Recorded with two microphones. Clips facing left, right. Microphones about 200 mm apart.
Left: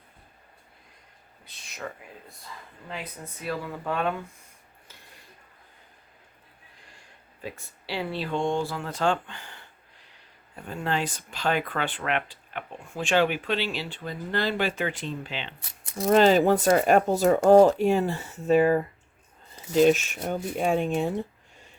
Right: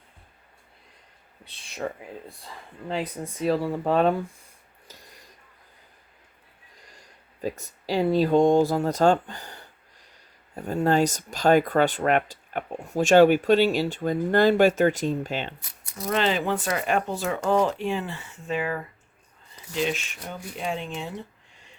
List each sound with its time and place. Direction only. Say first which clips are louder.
1.5 s speech: right 6 dB; 30° right (ahead or behind)
6.9 s a sound: right 1 dB; 40° right (ahead or behind)
7.6 s speech: right 8 dB; 40° right (ahead or behind)
15.9 s speech: left 6 dB; 25° left (ahead or behind)
16.1 s speech: left 6 dB; 40° left (ahead or behind)